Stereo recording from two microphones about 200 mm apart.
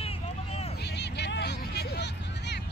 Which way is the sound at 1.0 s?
60° left (ahead or behind).